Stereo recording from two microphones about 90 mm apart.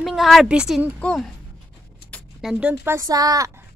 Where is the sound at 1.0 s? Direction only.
10° left (ahead or behind).